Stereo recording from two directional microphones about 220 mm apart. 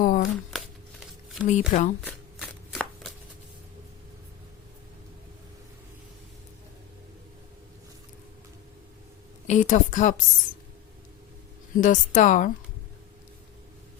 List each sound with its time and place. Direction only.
0.0 s shuffling cards: 40° left (ahead or behind)
0.5 s shuffling cards: centre (ahead or behind)
1.5 s a woman's voice: 35° left (ahead or behind)
2.0 s shuffling cards: 5° left (ahead or behind)
9.5 s speech: 35° left (ahead or behind)
11.8 s a woman's voice: 35° left (ahead or behind)